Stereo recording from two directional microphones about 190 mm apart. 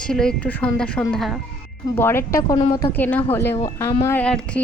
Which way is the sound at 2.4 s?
20° left (ahead or behind).